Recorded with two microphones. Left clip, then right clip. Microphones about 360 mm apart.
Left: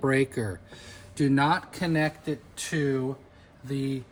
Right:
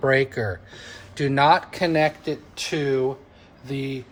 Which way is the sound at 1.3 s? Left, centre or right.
Right.